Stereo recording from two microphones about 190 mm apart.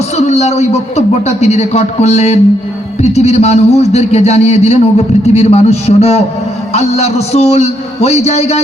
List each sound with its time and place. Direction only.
0.2 s speech: 35° left (ahead or behind)